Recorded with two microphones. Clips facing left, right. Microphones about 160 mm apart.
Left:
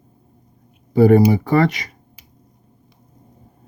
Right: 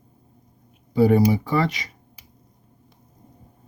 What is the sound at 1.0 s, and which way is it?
Speech, 55° left (ahead or behind).